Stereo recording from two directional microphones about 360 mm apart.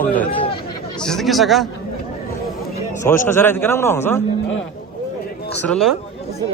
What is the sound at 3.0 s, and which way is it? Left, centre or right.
A man's voice, centre.